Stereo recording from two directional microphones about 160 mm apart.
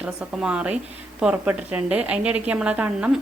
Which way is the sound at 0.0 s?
5° right (ahead or behind).